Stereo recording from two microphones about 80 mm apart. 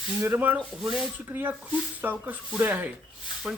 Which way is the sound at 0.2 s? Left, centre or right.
Right.